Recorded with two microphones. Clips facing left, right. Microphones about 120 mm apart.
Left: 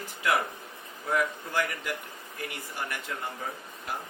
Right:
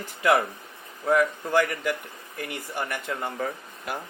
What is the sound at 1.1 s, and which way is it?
Speech, 55° right (ahead or behind).